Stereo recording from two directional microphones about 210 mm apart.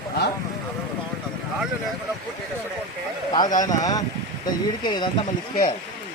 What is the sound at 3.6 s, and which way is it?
Speech, 15° left (ahead or behind).